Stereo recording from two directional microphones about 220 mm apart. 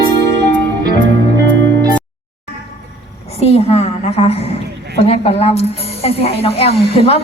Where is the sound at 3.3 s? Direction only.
30° left (ahead or behind).